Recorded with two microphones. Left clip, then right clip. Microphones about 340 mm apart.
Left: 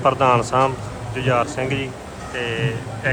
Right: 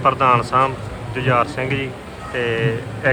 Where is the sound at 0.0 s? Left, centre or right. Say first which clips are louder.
Right 1 dB; centre.